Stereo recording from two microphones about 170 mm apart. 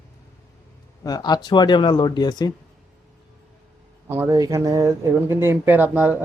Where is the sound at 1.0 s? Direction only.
25° left (ahead or behind).